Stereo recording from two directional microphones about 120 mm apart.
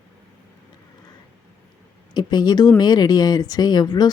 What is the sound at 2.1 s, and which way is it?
A woman's voice, 35° left (ahead or behind).